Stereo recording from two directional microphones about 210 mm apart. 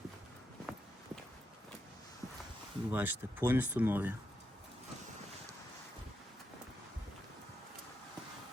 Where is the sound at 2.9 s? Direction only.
10° right (ahead or behind).